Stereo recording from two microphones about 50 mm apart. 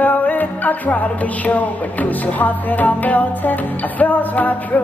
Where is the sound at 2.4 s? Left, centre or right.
Left.